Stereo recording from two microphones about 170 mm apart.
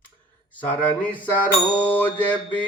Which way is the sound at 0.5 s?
10° left (ahead or behind).